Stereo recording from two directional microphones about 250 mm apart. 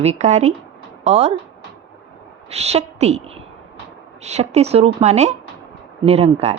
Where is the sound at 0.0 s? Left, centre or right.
Right.